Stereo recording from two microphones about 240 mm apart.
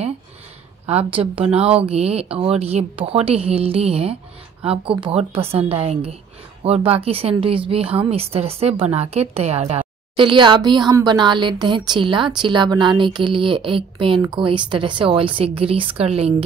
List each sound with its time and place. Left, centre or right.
0.8 s a woman's voice: right